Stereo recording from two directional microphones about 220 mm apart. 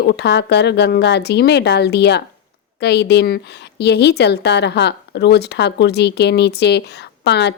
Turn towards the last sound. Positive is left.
turn(degrees=50)  # may be behind; listen again after turning